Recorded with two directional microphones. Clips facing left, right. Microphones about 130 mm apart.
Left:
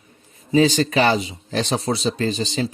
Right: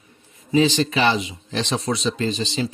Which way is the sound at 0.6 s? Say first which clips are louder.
Left 2 dB; 40° left (ahead or behind).